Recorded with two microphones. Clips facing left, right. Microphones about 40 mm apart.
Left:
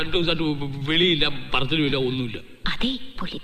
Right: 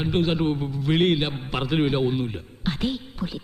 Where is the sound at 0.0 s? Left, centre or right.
Left.